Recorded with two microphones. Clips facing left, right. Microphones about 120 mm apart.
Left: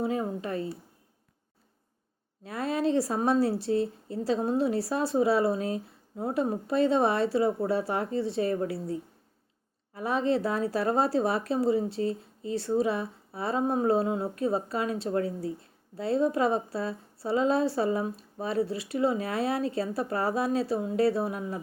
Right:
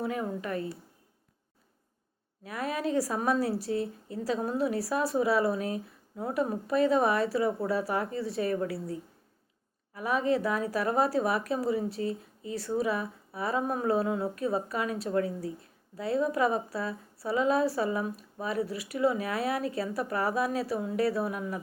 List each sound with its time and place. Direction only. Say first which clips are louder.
0.0 s a woman's voice: left 3 dB; 25° left (ahead or behind)
2.4 s a woman's voice: left 4 dB; 30° left (ahead or behind)